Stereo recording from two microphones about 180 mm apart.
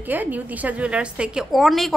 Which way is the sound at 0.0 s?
10° right (ahead or behind).